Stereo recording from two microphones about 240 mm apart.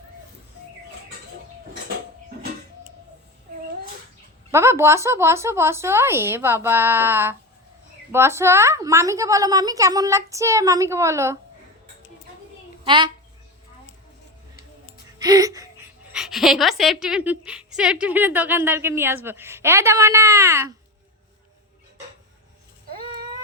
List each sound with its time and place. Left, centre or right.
4.5 s a woman's voice: centre
12.8 s a child's voice: centre
15.2 s music: centre
16.1 s a woman's voice: centre